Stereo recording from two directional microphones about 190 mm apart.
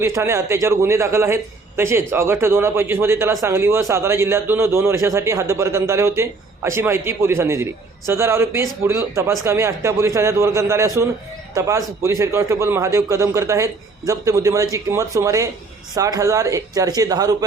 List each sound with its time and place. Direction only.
0.0 s a man's voice: 15° right (ahead or behind)